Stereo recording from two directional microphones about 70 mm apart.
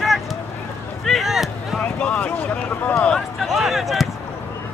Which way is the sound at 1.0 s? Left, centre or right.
Centre.